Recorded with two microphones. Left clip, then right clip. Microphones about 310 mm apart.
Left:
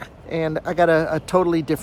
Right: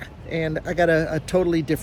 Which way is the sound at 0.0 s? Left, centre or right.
Centre.